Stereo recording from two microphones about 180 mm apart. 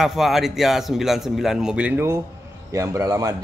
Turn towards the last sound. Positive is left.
turn(degrees=-20)  # may be behind; listen again after turning